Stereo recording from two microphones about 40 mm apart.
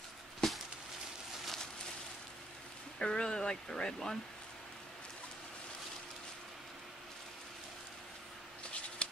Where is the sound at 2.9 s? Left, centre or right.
Left.